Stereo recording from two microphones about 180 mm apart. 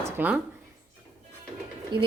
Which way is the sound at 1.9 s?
25° right (ahead or behind).